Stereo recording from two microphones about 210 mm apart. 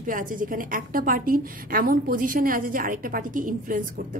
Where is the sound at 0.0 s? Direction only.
40° right (ahead or behind).